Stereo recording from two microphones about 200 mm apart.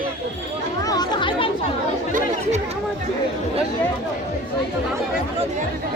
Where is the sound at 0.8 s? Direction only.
20° left (ahead or behind).